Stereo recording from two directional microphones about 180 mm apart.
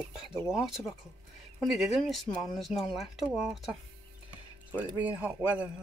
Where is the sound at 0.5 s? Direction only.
5° right (ahead or behind).